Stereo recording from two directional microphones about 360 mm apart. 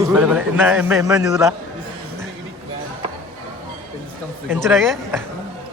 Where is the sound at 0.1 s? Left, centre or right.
Centre.